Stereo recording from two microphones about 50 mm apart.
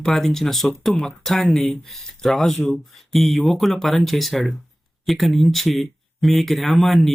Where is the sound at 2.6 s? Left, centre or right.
Left.